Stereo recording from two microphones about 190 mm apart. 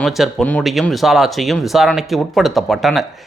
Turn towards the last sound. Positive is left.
turn(degrees=0)  # may be behind; listen again after turning